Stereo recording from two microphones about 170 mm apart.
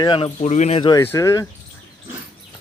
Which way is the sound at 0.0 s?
30° left (ahead or behind).